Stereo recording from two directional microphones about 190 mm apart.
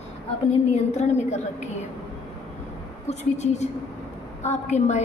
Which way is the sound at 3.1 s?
35° left (ahead or behind).